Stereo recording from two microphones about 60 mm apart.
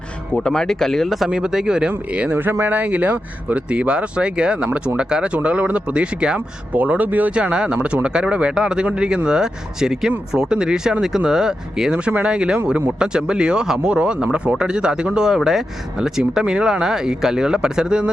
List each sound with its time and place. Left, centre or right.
0.3 s speech: centre
1.3 s speech: centre
2.1 s speech: right
7.3 s speech: centre